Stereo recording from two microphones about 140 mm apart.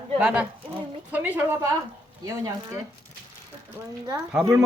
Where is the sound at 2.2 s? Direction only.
25° right (ahead or behind).